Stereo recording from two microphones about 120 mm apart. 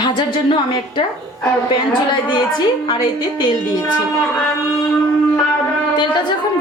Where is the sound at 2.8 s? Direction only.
35° left (ahead or behind).